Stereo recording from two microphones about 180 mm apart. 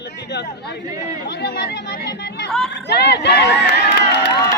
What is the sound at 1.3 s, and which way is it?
Speech, 65° left (ahead or behind).